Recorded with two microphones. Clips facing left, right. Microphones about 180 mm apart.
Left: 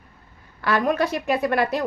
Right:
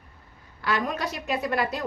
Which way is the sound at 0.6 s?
60° left (ahead or behind).